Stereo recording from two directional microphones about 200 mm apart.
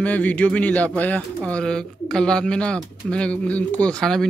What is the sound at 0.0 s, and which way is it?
Speech, 5° left (ahead or behind).